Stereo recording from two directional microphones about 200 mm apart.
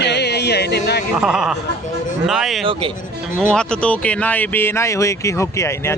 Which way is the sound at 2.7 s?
25° right (ahead or behind).